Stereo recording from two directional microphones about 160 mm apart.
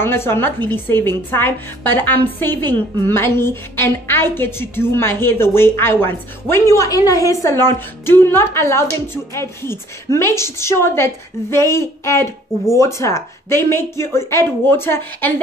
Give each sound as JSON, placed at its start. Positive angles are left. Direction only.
{"t": 0.0, "sound": "a woman's voice", "side_deg": 15}